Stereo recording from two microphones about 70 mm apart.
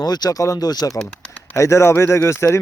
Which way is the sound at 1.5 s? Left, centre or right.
Left.